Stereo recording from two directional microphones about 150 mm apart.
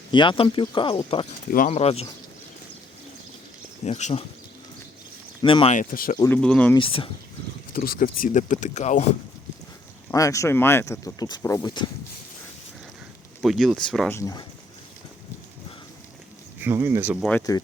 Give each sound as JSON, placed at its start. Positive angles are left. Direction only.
{"t": 0.1, "sound": "speech", "side_deg": 30}
{"t": 1.5, "sound": "speech", "side_deg": 50}
{"t": 3.8, "sound": "speech", "side_deg": 45}
{"t": 5.4, "sound": "speech", "side_deg": 35}
{"t": 5.7, "sound": "speech", "side_deg": 65}
{"t": 6.1, "sound": "speech", "side_deg": 15}
{"t": 6.7, "sound": "speech", "side_deg": 35}
{"t": 7.7, "sound": "speech", "side_deg": 70}
{"t": 10.1, "sound": "speech", "side_deg": 20}
{"t": 13.4, "sound": "speech", "side_deg": 0}
{"t": 14.1, "sound": "speech", "side_deg": 20}
{"t": 16.6, "sound": "speech", "side_deg": -15}
{"t": 17.5, "sound": "speech", "side_deg": 25}